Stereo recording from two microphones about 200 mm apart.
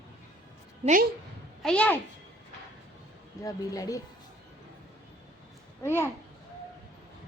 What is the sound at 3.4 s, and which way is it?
Speech, 15° left (ahead or behind).